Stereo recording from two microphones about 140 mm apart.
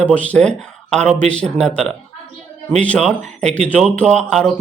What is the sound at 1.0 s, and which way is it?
Speech, 55° right (ahead or behind).